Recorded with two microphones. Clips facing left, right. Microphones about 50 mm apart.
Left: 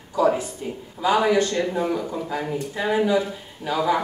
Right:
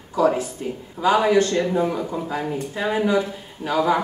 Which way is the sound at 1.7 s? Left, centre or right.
Right.